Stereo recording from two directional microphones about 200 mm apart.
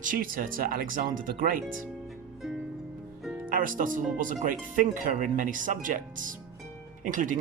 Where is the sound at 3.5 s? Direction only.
45° right (ahead or behind).